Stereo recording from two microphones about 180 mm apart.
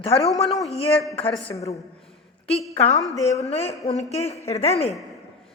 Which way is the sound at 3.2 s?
35° left (ahead or behind).